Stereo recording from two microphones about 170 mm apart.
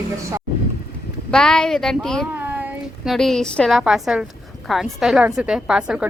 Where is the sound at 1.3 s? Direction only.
5° left (ahead or behind).